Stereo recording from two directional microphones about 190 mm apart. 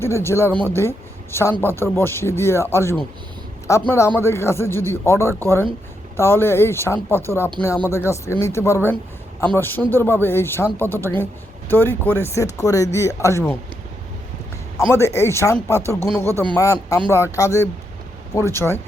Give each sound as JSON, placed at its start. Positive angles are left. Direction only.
{"t": 0.0, "sound": "speech", "side_deg": 15}
{"t": 14.9, "sound": "speech", "side_deg": 15}